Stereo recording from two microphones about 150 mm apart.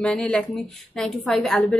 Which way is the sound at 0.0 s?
5° left (ahead or behind).